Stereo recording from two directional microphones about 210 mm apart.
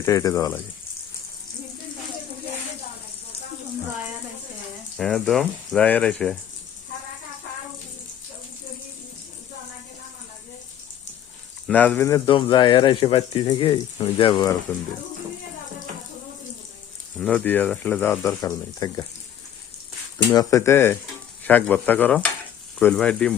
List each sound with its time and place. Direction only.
0.0 s speech: 15° left (ahead or behind)
4.9 s speech: centre (ahead or behind)
11.7 s speech: 5° left (ahead or behind)
17.2 s speech: 5° left (ahead or behind)
20.3 s speech: 15° left (ahead or behind)